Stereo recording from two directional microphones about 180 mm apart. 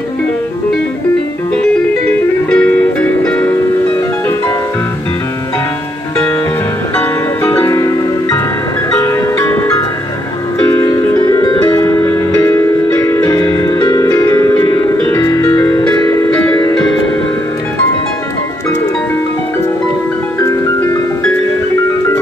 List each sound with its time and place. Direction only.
2.0 s music: 5° left (ahead or behind)
7.0 s music: 15° left (ahead or behind)
10.8 s music: 20° left (ahead or behind)
20.3 s music: 15° left (ahead or behind)